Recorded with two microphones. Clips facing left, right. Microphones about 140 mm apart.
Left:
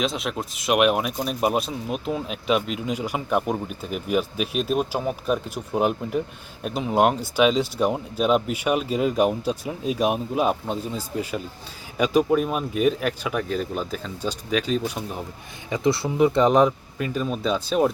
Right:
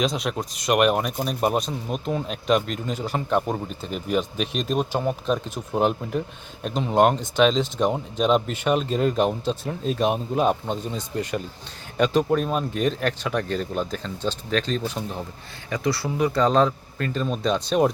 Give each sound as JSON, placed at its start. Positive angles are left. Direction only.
{"t": 0.0, "sound": "speech", "side_deg": 0}
{"t": 15.7, "sound": "speech", "side_deg": 25}